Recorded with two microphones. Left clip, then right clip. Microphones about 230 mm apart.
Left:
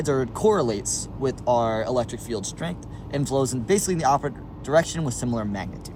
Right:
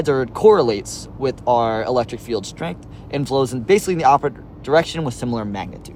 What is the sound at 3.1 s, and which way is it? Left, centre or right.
Speech, right.